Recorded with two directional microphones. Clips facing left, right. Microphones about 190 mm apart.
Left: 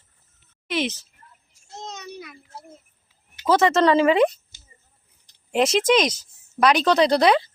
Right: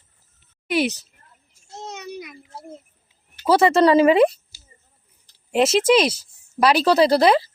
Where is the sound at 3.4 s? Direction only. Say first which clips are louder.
Right 2 dB; 10° right (ahead or behind).